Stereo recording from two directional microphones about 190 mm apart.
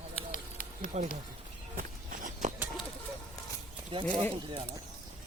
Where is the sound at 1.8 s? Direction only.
40° right (ahead or behind).